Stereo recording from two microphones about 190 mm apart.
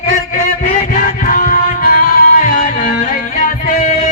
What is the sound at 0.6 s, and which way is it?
Music, 45° left (ahead or behind).